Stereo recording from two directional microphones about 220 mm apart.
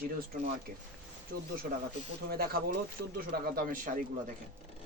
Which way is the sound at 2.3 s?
45° right (ahead or behind).